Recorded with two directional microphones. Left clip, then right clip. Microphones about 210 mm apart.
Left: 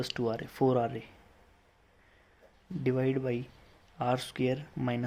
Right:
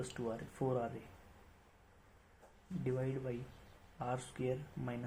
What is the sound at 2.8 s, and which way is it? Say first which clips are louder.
Speech: left 10 dB; 50° left (ahead or behind).